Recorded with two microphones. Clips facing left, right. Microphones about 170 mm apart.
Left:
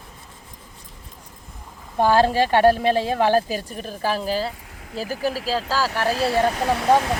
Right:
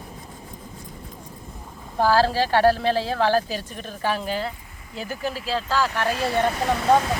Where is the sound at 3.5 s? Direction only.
40° left (ahead or behind).